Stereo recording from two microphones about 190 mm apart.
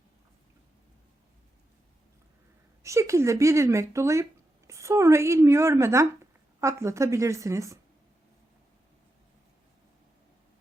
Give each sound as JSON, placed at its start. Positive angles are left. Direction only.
{"t": 2.8, "sound": "speech", "side_deg": -15}